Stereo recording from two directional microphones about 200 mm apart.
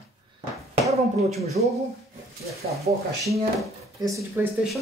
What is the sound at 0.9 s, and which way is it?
Speech, 30° right (ahead or behind).